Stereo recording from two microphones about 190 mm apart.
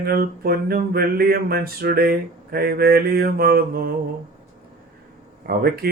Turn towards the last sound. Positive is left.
turn(degrees=-55)  # may be behind; listen again after turning